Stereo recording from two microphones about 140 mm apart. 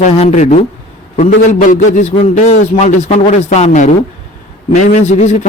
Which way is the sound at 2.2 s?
55° left (ahead or behind).